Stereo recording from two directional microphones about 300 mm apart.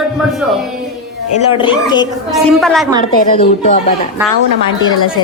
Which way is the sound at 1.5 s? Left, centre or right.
Centre.